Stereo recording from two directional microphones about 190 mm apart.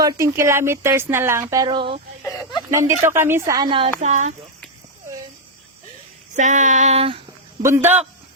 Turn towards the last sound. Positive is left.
turn(degrees=-10)  # may be behind; listen again after turning